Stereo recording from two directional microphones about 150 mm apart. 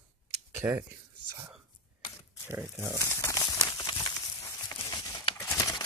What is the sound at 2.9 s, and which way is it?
Crumpling, 20° left (ahead or behind).